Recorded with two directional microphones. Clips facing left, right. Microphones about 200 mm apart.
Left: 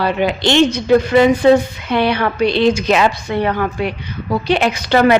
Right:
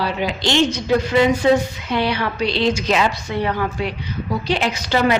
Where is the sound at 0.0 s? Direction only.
60° left (ahead or behind).